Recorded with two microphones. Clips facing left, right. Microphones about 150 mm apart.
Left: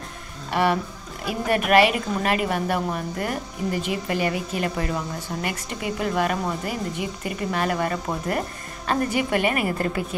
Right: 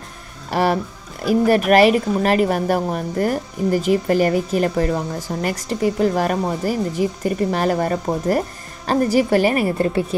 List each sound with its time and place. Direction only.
0.5 s speech: 40° right (ahead or behind)